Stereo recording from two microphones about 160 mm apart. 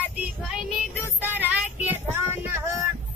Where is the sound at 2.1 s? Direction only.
15° right (ahead or behind).